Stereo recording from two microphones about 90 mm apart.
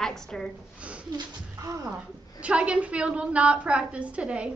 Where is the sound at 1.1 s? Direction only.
40° right (ahead or behind).